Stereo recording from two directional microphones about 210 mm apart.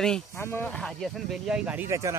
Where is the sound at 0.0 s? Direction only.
5° left (ahead or behind).